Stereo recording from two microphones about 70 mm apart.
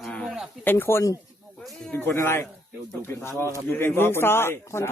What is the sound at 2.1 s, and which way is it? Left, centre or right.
Speech, left.